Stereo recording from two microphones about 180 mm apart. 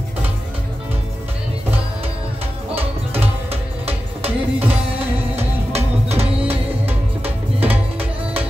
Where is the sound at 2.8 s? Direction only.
35° right (ahead or behind).